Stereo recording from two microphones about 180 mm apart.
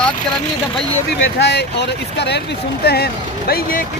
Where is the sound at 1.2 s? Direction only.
70° left (ahead or behind).